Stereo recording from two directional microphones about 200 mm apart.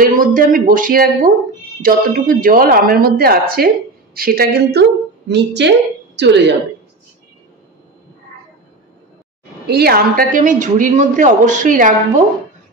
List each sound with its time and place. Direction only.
0.0 s a woman's voice: 40° right (ahead or behind); by 6.5 s 60° right (ahead or behind)
9.7 s a woman's voice: 50° right (ahead or behind)